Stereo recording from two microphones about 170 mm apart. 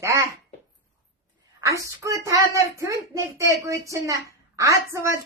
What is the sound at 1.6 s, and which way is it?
A woman's voice, 20° right (ahead or behind).